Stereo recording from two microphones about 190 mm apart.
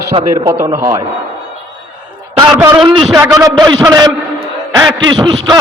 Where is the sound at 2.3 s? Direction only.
10° right (ahead or behind).